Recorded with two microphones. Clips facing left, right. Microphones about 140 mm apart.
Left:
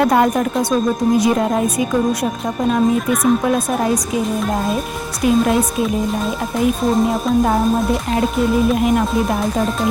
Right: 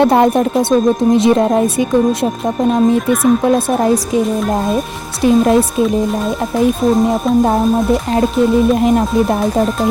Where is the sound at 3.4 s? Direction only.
30° right (ahead or behind).